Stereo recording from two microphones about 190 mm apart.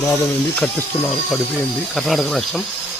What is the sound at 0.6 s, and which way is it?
Speech, 10° left (ahead or behind).